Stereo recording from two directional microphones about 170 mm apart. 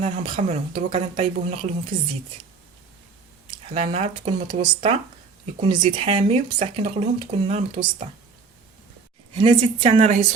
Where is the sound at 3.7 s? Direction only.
40° right (ahead or behind).